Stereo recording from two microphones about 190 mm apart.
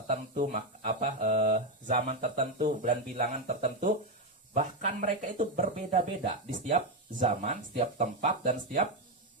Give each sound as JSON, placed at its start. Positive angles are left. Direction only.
{"t": 0.1, "sound": "speech", "side_deg": -40}